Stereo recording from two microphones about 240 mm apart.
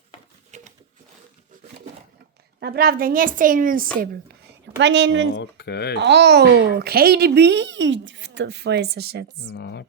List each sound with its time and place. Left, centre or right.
0.5 s sewing machine: right
2.6 s a woman's voice: right
4.0 s whispering: right
4.8 s a child's voice: right
5.3 s speech: left
6.0 s a child's voice: right
9.5 s speech: left